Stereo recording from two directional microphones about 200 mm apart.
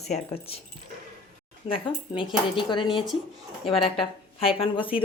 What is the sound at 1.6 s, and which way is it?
Speech, 25° left (ahead or behind).